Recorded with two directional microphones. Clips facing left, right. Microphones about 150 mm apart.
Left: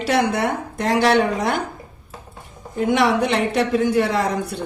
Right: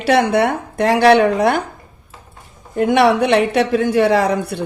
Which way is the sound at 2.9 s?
65° right (ahead or behind).